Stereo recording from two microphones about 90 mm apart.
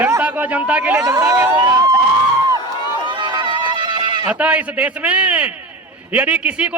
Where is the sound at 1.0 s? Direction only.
35° right (ahead or behind).